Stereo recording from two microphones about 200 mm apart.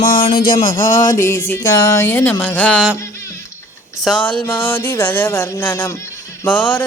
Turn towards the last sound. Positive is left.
turn(degrees=10)  # may be behind; listen again after turning